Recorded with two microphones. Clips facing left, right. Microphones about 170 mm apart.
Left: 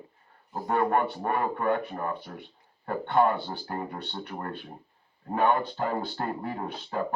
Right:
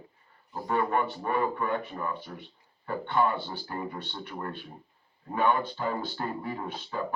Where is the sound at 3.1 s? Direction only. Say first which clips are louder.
Left 3 dB; 50° left (ahead or behind).